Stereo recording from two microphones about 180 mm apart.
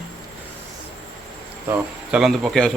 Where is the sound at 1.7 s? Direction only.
5° right (ahead or behind).